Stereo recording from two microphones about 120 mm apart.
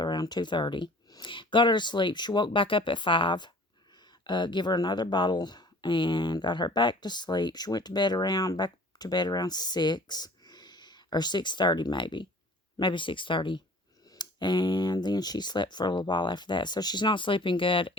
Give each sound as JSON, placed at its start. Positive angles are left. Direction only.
{"t": 0.0, "sound": "speech", "side_deg": 35}